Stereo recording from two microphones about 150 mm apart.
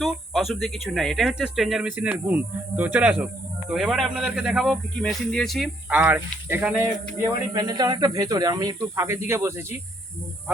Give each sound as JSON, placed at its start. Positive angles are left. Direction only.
{"t": 0.0, "sound": "speech", "side_deg": 0}
{"t": 5.9, "sound": "speech", "side_deg": -15}
{"t": 7.5, "sound": "speech", "side_deg": -25}